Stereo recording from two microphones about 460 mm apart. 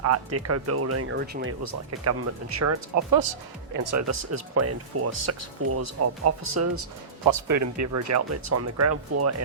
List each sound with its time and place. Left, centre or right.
0.0 s speech: right
1.6 s speech: right
3.9 s speech: right